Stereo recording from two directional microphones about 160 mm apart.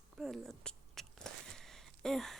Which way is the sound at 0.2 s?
Centre (ahead or behind).